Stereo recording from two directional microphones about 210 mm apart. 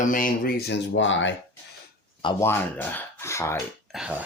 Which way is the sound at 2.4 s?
10° left (ahead or behind).